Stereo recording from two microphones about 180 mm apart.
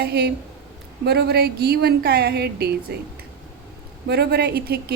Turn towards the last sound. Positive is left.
turn(degrees=-60)  # may be behind; listen again after turning